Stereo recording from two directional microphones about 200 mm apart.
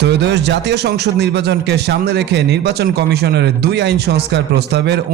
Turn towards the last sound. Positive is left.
turn(degrees=-55)  # may be behind; listen again after turning